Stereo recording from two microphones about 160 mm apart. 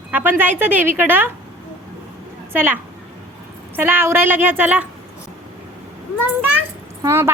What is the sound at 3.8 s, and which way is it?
A woman's voice, 10° right (ahead or behind).